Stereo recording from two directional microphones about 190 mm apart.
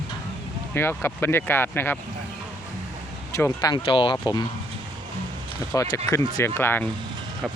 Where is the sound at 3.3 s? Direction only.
15° left (ahead or behind).